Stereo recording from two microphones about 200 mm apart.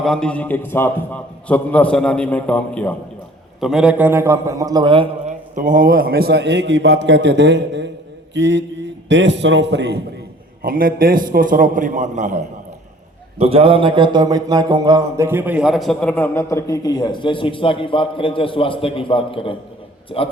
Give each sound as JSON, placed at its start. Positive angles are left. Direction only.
{"t": 0.0, "sound": "a man's voice", "side_deg": 5}
{"t": 5.3, "sound": "a man's voice", "side_deg": -40}
{"t": 10.6, "sound": "a man's voice", "side_deg": -45}